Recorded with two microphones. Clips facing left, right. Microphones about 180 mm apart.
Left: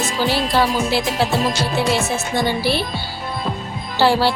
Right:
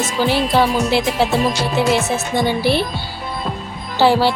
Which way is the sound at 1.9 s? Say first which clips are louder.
Right 2 dB; 20° right (ahead or behind).